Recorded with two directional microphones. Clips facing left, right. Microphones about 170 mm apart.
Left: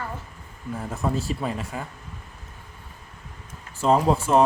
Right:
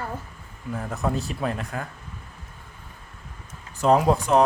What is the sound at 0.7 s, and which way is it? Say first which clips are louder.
Speech: even; centre (ahead or behind).